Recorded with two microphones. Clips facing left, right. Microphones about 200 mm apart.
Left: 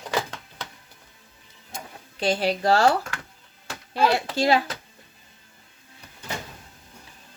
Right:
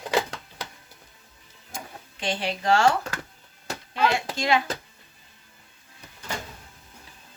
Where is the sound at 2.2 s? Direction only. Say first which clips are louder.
Left 5 dB; 40° left (ahead or behind).